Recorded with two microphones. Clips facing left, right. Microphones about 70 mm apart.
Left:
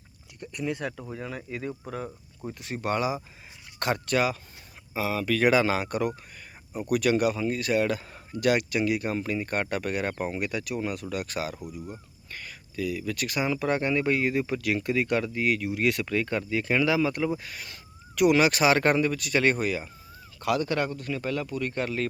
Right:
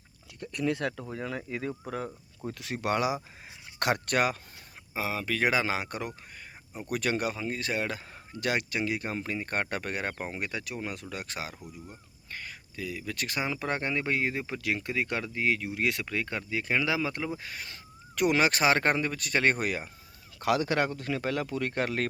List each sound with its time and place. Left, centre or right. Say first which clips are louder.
0.5 s speech: right 2 dB; centre
0.9 s speech: right 1 dB; centre
2.6 s speech: left 1 dB; right
3.8 s speech: left 1 dB; right
4.9 s speech: left 4 dB; right
6.9 s speech: left 6 dB; right
20.4 s speech: even; right